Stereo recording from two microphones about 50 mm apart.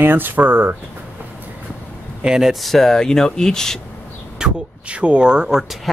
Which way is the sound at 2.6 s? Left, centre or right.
Centre.